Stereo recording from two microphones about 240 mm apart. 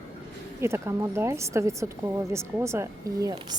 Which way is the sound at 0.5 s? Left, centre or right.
Centre.